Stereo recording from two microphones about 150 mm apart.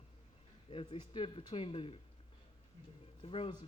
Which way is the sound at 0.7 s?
35° left (ahead or behind).